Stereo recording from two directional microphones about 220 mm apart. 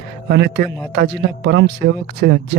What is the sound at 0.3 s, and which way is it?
Speech, 50° right (ahead or behind).